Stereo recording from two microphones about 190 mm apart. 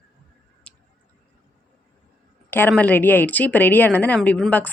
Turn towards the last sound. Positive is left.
turn(degrees=5)  # may be behind; listen again after turning